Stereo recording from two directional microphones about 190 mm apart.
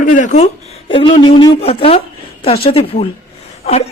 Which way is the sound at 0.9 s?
30° left (ahead or behind).